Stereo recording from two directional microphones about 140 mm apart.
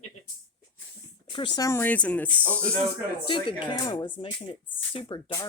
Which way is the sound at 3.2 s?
35° left (ahead or behind).